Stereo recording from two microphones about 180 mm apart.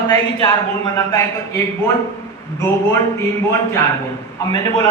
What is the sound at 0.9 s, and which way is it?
A man's voice, 15° left (ahead or behind).